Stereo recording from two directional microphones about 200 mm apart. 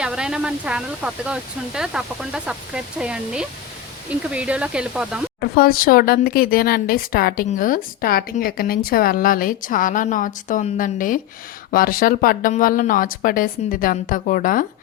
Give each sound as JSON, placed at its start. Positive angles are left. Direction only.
{"t": 0.0, "sound": "speech", "side_deg": -5}
{"t": 5.4, "sound": "speech", "side_deg": 50}